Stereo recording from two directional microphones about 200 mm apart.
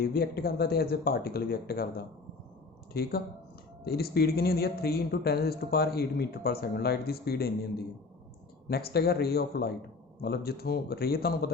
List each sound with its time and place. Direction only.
0.0 s speech: 50° left (ahead or behind)